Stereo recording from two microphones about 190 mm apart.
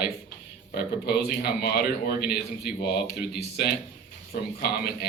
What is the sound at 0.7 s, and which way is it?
A man's voice, 55° left (ahead or behind).